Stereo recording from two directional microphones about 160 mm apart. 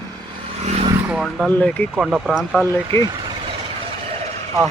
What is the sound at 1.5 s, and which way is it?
Speech, 10° left (ahead or behind).